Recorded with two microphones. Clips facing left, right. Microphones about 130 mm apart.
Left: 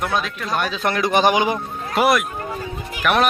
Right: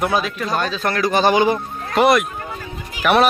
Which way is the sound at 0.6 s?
15° left (ahead or behind).